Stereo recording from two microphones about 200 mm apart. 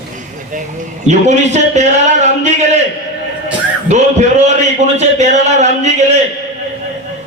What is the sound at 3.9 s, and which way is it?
A man's voice, 35° right (ahead or behind).